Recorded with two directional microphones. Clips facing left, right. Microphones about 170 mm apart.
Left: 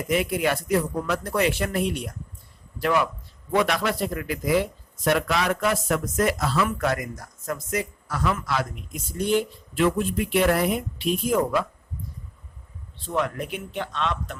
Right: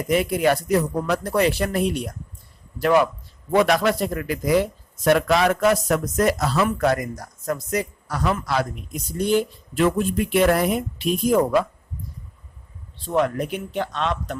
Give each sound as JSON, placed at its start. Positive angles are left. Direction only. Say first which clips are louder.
{"t": 0.1, "sound": "speech", "louder": "right 4 dB", "side_deg": -40}
{"t": 13.1, "sound": "speech", "louder": "right 5 dB", "side_deg": -40}